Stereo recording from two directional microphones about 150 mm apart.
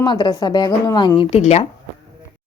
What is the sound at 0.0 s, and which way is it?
Speech, 30° left (ahead or behind).